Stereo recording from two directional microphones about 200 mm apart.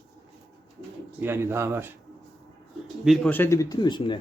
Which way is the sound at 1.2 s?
10° right (ahead or behind).